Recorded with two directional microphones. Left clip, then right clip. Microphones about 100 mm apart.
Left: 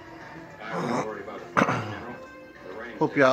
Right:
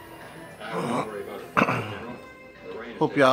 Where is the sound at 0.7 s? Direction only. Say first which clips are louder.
Right 1 dB; 30° left (ahead or behind).